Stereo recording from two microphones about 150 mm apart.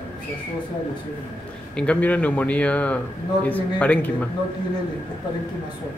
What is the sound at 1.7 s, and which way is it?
Speech, 5° left (ahead or behind).